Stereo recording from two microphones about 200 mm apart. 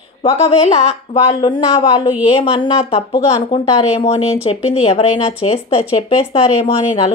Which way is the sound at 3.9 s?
30° left (ahead or behind).